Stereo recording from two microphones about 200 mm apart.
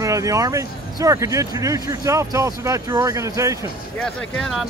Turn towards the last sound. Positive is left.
turn(degrees=5)  # may be behind; listen again after turning